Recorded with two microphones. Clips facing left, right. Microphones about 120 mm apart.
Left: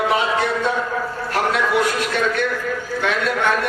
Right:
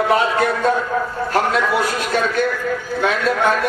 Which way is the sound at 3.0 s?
35° right (ahead or behind).